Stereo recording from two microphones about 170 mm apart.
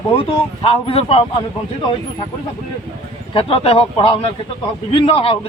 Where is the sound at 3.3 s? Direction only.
35° left (ahead or behind).